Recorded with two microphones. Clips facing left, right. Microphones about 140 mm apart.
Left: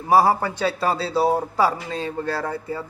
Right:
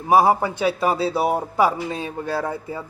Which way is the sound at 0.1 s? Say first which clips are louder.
Right 1 dB; 20° right (ahead or behind).